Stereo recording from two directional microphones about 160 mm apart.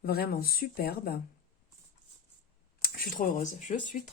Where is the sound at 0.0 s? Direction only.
70° left (ahead or behind).